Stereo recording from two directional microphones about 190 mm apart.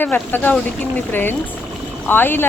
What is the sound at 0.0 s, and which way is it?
Speech, 10° left (ahead or behind).